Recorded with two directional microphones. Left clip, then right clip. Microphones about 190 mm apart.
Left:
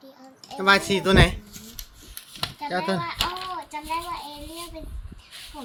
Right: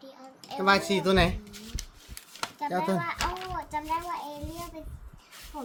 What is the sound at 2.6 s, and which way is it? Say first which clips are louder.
Speech: left 2 dB; 10° right (ahead or behind).